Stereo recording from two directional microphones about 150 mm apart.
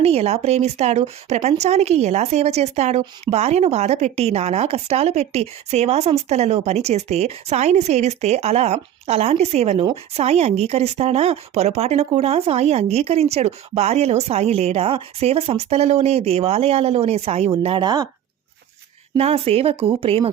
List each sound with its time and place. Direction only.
0.0 s speech: 45° right (ahead or behind); by 18.1 s 25° right (ahead or behind)
19.1 s speech: 45° right (ahead or behind)